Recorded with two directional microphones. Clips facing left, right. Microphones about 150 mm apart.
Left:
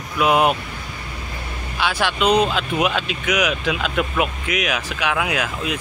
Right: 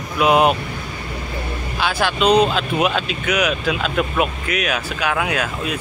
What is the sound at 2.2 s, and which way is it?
Speech, 10° left (ahead or behind).